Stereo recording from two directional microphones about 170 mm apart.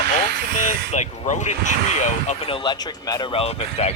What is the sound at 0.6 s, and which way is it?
Speech, 45° left (ahead or behind).